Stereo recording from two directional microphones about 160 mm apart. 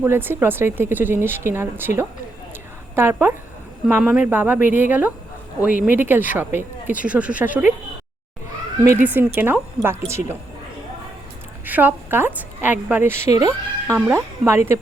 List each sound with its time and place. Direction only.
0.0 s a woman's voice: 15° right (ahead or behind)
8.8 s speech: 10° right (ahead or behind)
11.6 s a woman's voice: 10° right (ahead or behind)